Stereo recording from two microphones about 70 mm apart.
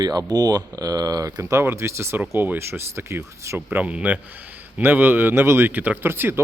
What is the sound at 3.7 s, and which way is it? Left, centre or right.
Speech, right.